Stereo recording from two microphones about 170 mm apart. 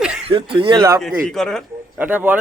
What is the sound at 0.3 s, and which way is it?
Speech, 30° right (ahead or behind).